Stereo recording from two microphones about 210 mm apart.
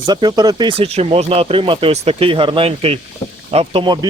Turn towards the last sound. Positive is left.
turn(degrees=-20)  # may be behind; listen again after turning